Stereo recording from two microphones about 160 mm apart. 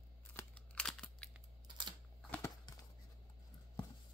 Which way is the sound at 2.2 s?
10° left (ahead or behind).